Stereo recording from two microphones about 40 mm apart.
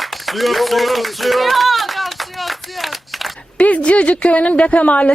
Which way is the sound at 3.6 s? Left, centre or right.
Left.